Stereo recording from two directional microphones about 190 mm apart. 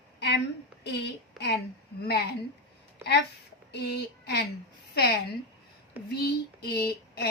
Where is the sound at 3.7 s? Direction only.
60° left (ahead or behind).